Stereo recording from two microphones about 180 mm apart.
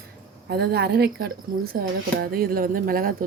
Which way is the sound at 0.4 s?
65° right (ahead or behind).